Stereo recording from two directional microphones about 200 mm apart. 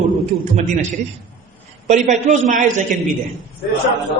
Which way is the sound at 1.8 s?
40° right (ahead or behind).